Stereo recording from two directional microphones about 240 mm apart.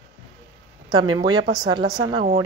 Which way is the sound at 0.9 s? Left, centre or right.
Centre.